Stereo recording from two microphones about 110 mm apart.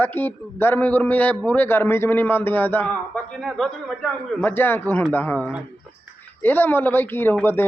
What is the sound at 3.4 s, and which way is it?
Speech, 5° left (ahead or behind).